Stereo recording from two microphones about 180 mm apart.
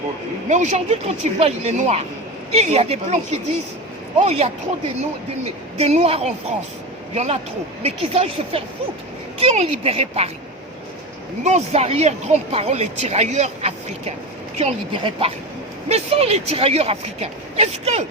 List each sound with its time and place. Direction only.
0.4 s speech: 40° right (ahead or behind)
5.8 s speech: 35° right (ahead or behind)
11.4 s speech: 40° right (ahead or behind)